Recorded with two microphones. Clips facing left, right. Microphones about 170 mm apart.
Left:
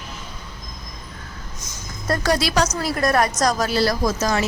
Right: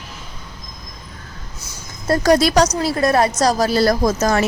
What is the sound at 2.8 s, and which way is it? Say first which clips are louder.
A woman's voice: right 3 dB; 25° right (ahead or behind).